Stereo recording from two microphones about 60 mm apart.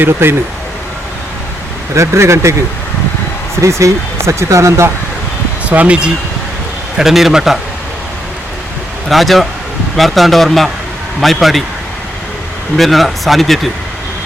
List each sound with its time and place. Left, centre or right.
0.0 s speech: right
2.0 s speech: right
3.6 s speech: right
5.6 s speech: right
6.9 s speech: centre
9.0 s speech: centre
12.7 s speech: centre